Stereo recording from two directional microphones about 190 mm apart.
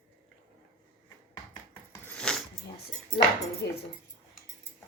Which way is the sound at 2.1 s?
5° left (ahead or behind).